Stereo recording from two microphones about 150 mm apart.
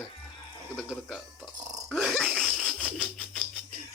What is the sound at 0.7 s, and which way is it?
Dog, centre (ahead or behind).